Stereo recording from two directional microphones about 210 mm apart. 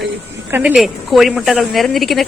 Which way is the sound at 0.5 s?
5° right (ahead or behind).